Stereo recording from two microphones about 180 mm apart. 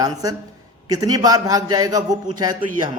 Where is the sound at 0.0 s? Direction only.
20° right (ahead or behind).